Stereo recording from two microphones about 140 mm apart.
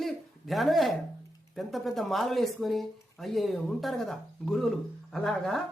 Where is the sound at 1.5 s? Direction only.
Centre (ahead or behind).